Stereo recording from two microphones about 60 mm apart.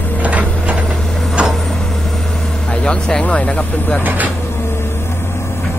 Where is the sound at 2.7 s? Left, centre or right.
Centre.